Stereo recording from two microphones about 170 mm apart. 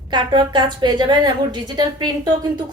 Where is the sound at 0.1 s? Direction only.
25° right (ahead or behind).